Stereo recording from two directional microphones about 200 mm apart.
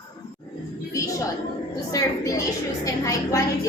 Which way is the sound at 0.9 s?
15° left (ahead or behind).